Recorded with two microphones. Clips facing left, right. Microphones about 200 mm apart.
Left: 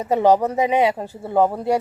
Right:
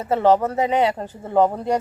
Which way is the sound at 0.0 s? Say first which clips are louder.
Left 1 dB; 15° left (ahead or behind).